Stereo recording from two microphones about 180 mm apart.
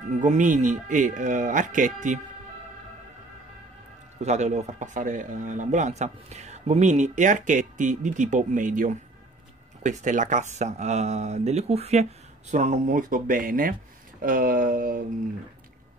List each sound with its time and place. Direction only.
0.2 s speech: 45° right (ahead or behind)
4.2 s speech: 40° right (ahead or behind)